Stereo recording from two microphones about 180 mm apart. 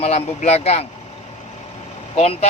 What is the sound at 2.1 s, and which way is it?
Speech, 35° left (ahead or behind).